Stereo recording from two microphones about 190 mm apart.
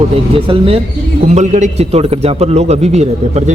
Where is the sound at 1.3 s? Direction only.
40° right (ahead or behind).